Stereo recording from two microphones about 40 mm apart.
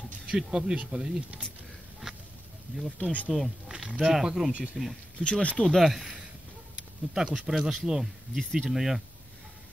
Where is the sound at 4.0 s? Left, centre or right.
Centre.